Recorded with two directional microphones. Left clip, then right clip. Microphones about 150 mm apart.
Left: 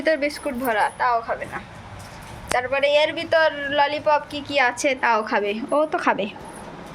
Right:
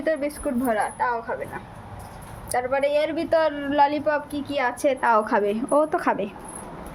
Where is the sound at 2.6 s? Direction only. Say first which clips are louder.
Left 3 dB; 25° right (ahead or behind).